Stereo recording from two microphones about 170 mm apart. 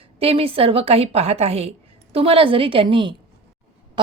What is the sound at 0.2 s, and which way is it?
A woman's voice, 35° right (ahead or behind).